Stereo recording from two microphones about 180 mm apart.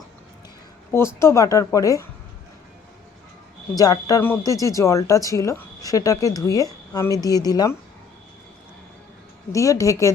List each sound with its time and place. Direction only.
0.9 s a woman's voice: 15° left (ahead or behind)
3.8 s speech: 20° left (ahead or behind)
9.5 s a woman's voice: 20° left (ahead or behind)